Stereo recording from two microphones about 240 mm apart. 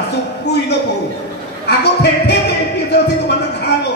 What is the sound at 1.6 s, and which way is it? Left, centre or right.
Speech, left.